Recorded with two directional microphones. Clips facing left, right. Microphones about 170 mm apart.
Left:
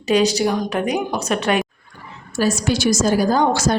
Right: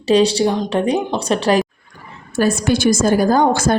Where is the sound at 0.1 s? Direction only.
30° right (ahead or behind).